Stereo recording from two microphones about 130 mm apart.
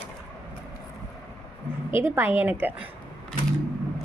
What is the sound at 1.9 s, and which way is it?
Speech, 20° right (ahead or behind).